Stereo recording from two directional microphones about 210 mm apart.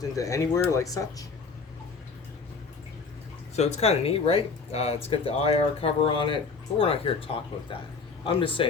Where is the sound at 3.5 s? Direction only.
30° left (ahead or behind).